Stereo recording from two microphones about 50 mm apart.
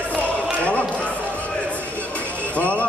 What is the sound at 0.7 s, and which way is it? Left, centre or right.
Basketball bounce, left.